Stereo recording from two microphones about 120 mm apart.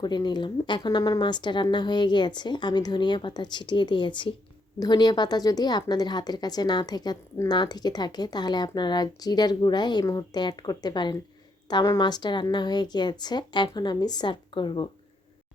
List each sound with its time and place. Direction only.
0.0 s speech: 35° left (ahead or behind)